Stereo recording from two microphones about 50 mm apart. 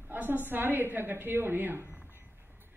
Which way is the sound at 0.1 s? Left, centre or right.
Right.